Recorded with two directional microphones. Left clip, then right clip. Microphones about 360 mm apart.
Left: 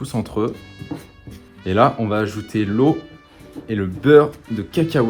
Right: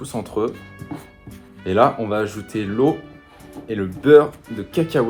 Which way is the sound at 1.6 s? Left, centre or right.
Centre.